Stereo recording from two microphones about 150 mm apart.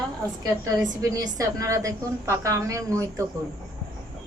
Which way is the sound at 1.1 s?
25° right (ahead or behind).